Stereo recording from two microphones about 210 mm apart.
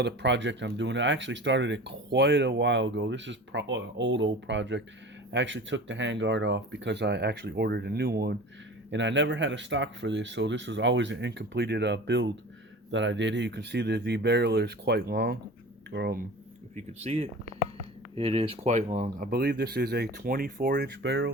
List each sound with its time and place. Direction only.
0.0 s speech: 55° right (ahead or behind)
16.7 s speech: 30° right (ahead or behind); by 21.3 s 60° right (ahead or behind)